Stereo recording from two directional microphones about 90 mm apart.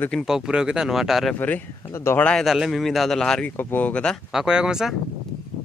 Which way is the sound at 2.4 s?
5° right (ahead or behind).